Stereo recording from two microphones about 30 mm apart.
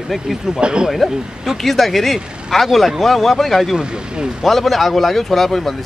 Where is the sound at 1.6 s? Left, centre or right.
Centre.